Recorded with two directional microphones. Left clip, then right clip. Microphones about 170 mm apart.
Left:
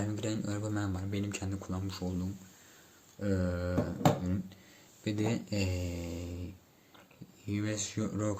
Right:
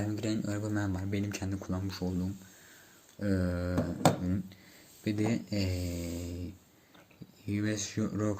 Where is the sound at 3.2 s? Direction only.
10° right (ahead or behind).